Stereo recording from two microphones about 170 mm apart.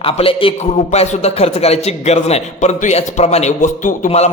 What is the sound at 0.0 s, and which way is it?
A man's voice, 35° left (ahead or behind).